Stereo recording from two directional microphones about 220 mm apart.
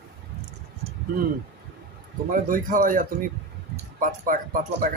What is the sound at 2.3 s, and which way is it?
Speech, 40° right (ahead or behind).